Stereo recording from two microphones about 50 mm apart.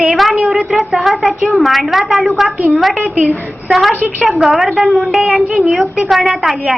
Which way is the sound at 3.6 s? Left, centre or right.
Centre.